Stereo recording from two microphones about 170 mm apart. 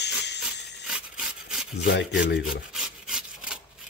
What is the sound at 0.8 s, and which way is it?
Rub, 5° right (ahead or behind).